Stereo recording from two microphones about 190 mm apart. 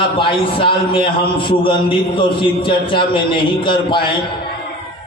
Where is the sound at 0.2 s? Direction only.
25° left (ahead or behind).